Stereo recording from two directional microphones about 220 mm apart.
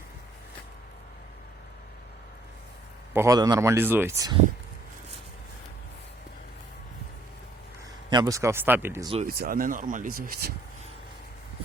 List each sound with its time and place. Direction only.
3.1 s speech: 15° right (ahead or behind)
8.1 s speech: 15° right (ahead or behind)
9.2 s speech: 40° right (ahead or behind)